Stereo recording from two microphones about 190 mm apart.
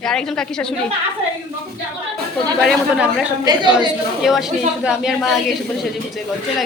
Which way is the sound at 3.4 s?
25° right (ahead or behind).